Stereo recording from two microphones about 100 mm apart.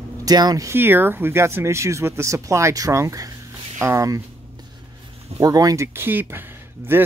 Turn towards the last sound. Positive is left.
turn(degrees=-20)  # may be behind; listen again after turning